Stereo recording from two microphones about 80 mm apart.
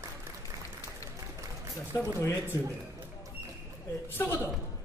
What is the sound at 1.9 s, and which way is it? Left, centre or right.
Speech, left.